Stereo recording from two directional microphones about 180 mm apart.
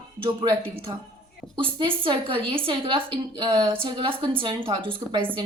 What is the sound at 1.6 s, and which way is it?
A woman's voice, 30° right (ahead or behind).